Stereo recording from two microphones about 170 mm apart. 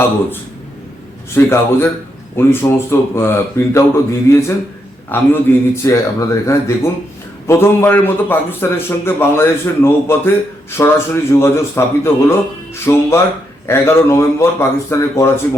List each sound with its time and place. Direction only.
1.4 s a man's voice: 15° left (ahead or behind)